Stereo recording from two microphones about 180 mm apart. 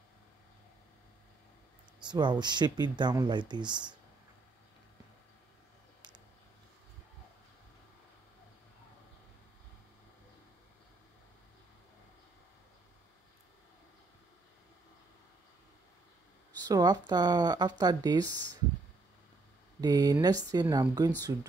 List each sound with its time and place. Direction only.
2.0 s speech: 25° right (ahead or behind)
16.6 s speech: 20° right (ahead or behind)
19.8 s speech: 20° right (ahead or behind)